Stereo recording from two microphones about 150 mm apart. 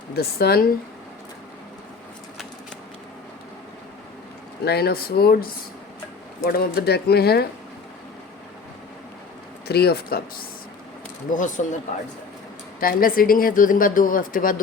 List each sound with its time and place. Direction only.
0.2 s speech: 90° left
4.6 s speech: 90° left
9.6 s speech: 90° left
11.3 s speech: 60° left (ahead or behind)
12.8 s speech: 75° left (ahead or behind)